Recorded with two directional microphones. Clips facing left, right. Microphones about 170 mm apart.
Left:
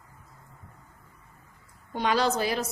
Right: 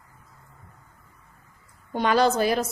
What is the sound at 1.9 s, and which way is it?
Speech, 50° right (ahead or behind).